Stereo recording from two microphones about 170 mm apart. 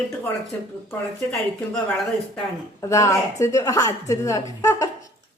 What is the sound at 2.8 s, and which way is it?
A woman's voice, 20° left (ahead or behind).